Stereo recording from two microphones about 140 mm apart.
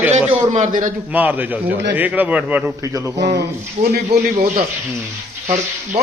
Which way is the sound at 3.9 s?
90° right.